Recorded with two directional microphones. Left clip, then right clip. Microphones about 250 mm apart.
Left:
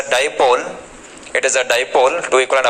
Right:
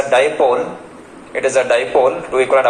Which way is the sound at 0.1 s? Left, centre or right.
Left.